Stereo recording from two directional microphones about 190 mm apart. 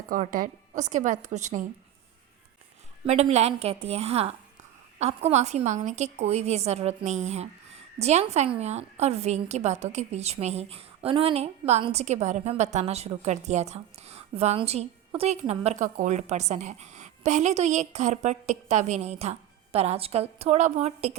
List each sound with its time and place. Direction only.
0.1 s a woman's voice: 45° right (ahead or behind)
3.1 s a woman's voice: 35° right (ahead or behind)